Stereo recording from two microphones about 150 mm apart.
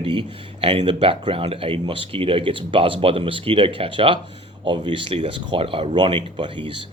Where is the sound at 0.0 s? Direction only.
35° right (ahead or behind).